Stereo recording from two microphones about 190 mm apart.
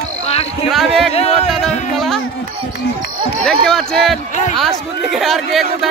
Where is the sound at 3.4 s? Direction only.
Centre (ahead or behind).